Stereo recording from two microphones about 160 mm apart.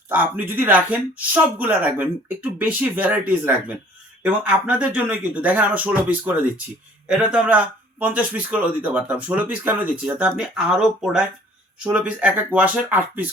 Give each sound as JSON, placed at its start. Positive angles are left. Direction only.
{"t": 0.1, "sound": "speech", "side_deg": -10}
{"t": 11.8, "sound": "speech", "side_deg": -10}